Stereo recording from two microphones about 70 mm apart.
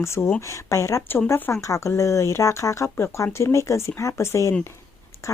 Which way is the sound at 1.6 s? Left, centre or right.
Left.